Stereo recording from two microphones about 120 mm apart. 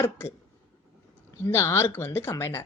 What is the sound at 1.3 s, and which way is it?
Speech, 20° left (ahead or behind).